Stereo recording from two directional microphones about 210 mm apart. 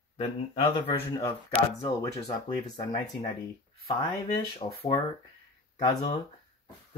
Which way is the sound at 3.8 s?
20° left (ahead or behind).